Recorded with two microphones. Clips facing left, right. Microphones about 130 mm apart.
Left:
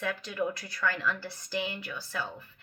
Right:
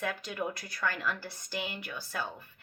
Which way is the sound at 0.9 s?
15° right (ahead or behind).